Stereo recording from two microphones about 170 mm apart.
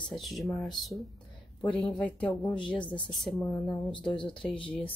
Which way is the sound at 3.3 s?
15° left (ahead or behind).